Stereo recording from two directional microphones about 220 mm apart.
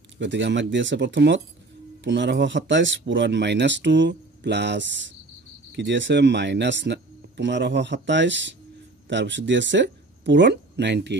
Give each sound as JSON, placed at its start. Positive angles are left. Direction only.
{"t": 0.2, "sound": "speech", "side_deg": -55}